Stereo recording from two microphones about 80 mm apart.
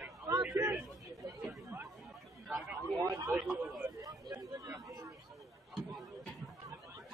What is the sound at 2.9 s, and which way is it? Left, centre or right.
Speech, right.